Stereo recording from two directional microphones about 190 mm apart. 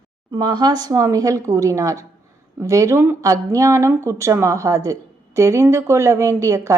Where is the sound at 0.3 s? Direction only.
20° right (ahead or behind).